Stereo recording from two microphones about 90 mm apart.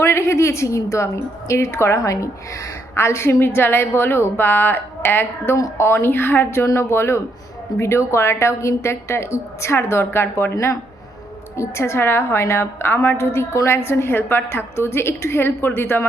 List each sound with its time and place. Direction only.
0.0 s a woman's voice: 30° left (ahead or behind)